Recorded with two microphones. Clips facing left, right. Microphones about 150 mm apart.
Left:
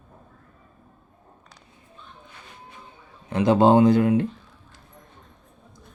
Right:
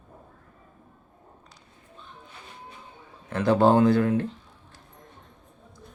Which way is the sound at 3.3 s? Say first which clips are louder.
Left 3 dB; 15° left (ahead or behind).